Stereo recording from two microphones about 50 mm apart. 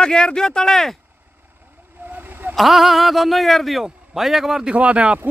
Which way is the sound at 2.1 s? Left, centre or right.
Right.